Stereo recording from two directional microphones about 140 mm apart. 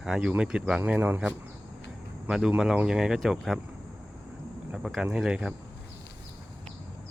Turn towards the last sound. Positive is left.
turn(degrees=-5)  # may be behind; listen again after turning